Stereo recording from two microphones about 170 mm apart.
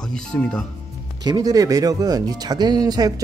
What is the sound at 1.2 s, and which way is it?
Speech, 25° right (ahead or behind).